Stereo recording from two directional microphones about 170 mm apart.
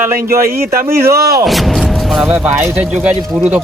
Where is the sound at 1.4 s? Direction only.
Centre (ahead or behind).